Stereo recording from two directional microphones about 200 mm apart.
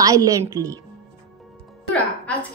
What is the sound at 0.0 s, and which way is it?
Speech, 15° right (ahead or behind).